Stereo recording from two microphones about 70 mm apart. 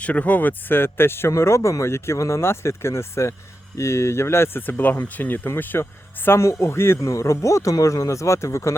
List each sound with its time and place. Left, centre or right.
0.0 s speech: centre; by 8.7 s left